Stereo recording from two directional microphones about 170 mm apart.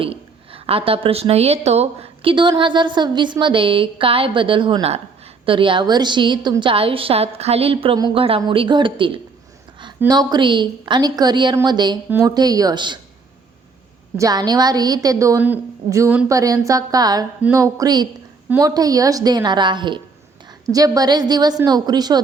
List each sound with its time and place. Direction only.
0.0 s a woman's voice: 35° right (ahead or behind)
14.2 s a woman's voice: 20° right (ahead or behind)